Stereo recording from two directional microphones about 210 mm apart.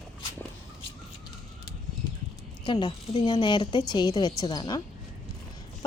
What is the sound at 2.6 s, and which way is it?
Speech, 20° left (ahead or behind).